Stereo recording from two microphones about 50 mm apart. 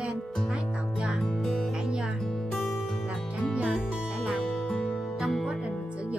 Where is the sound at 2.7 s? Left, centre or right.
Centre.